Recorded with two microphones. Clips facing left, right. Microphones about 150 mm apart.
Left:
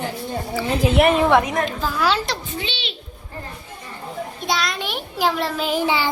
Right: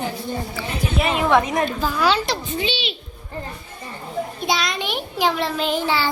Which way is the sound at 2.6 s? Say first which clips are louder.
Right 5 dB; 10° right (ahead or behind).